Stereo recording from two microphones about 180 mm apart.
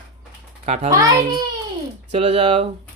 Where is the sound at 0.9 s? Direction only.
20° right (ahead or behind).